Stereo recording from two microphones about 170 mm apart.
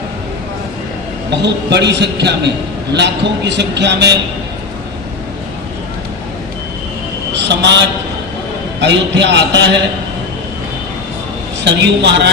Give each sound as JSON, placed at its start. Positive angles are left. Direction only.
{"t": 1.4, "sound": "a man's voice", "side_deg": -85}
{"t": 7.3, "sound": "a man's voice", "side_deg": -90}
{"t": 8.8, "sound": "a man's voice", "side_deg": -90}
{"t": 11.6, "sound": "a man's voice", "side_deg": -90}